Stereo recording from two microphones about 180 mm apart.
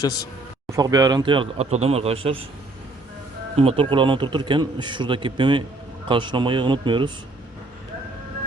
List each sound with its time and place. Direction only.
0.0 s speech: 20° left (ahead or behind)
0.7 s a man's voice: 20° right (ahead or behind)
3.6 s a man's voice: 30° right (ahead or behind)